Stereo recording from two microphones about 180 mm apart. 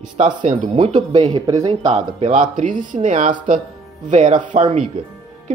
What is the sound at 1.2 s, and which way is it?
Speech, 20° right (ahead or behind).